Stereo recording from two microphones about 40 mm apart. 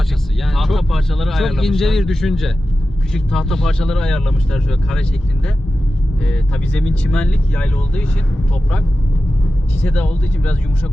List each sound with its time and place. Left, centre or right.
0.4 s a man's voice: centre
6.2 s speech: left
9.8 s speech: left